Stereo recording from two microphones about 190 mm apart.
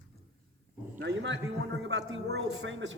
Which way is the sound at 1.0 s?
65° right (ahead or behind).